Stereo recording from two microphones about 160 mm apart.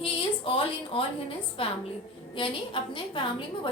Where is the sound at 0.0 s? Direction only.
35° left (ahead or behind).